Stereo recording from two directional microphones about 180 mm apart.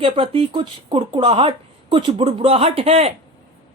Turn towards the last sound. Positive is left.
turn(degrees=-35)  # may be behind; listen again after turning